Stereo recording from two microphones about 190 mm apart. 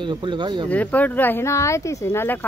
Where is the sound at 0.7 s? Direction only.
10° left (ahead or behind).